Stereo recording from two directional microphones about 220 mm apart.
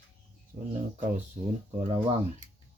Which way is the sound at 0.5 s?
35° right (ahead or behind).